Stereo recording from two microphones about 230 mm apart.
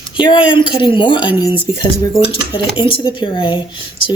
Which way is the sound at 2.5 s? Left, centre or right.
Left.